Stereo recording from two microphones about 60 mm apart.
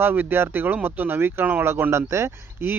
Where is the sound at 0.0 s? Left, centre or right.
Right.